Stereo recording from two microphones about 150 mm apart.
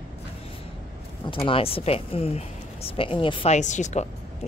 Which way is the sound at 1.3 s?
35° left (ahead or behind).